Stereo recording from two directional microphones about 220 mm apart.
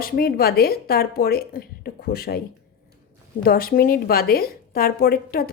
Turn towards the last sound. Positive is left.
turn(degrees=45)  # may be behind; listen again after turning